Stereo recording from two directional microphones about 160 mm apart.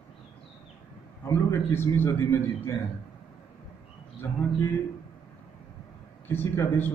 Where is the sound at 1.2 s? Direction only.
15° left (ahead or behind).